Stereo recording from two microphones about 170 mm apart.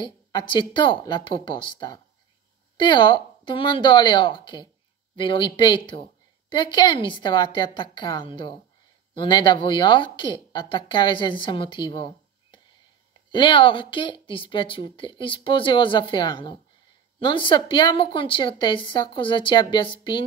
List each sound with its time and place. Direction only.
0.0 s a woman's voice: 25° left (ahead or behind)